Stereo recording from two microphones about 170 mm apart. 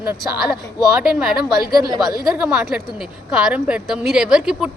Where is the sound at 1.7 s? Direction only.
25° right (ahead or behind).